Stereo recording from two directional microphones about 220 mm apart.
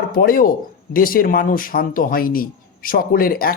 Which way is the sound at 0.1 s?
40° left (ahead or behind).